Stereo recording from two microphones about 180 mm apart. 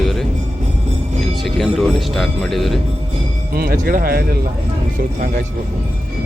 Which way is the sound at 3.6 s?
55° right (ahead or behind).